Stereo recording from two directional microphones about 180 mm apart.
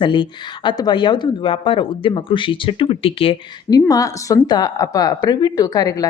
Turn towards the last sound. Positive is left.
turn(degrees=20)  # may be behind; listen again after turning